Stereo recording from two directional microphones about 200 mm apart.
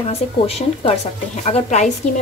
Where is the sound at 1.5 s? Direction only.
35° left (ahead or behind).